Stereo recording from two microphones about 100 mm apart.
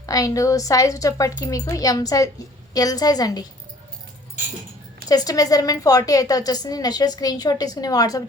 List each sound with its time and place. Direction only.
0.0 s a woman's voice: 35° left (ahead or behind)
5.0 s a woman's voice: 40° left (ahead or behind)